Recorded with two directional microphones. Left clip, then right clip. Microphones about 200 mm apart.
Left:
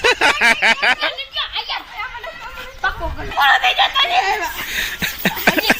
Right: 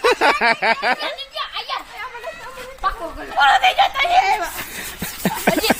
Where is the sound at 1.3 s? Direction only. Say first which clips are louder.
Left 4 dB; 55° right (ahead or behind).